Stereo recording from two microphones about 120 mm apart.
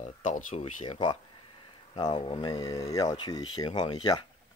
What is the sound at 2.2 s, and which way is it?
Speech, 50° left (ahead or behind).